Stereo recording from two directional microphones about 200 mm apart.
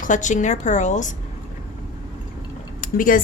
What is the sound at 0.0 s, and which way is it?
A woman's voice, 40° left (ahead or behind).